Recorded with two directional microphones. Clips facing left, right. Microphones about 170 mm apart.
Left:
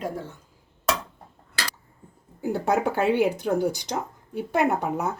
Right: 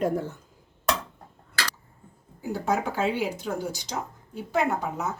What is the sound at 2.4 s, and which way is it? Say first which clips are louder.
Speech: left 4 dB; 60° left (ahead or behind).